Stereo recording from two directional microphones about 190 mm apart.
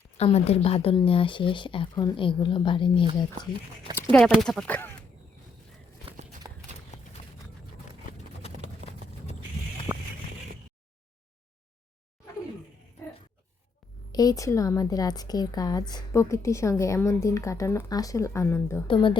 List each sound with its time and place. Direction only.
0.2 s speech: 35° left (ahead or behind)
4.3 s speech: centre (ahead or behind)
6.9 s clip-clop: 40° left (ahead or behind)
8.8 s clip-clop: 35° right (ahead or behind)
9.9 s a sound: 10° right (ahead or behind)
14.1 s a woman's voice: 20° left (ahead or behind)
18.9 s speech: 25° left (ahead or behind)